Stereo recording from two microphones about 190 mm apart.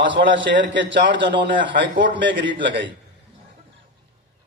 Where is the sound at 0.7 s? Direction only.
75° right (ahead or behind).